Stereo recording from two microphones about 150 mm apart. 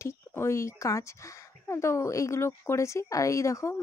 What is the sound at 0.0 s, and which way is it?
Speech, 15° left (ahead or behind).